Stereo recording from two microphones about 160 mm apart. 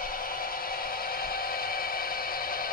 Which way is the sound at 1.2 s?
65° left (ahead or behind).